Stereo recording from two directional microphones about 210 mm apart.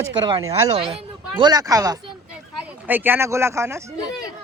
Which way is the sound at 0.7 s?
25° right (ahead or behind).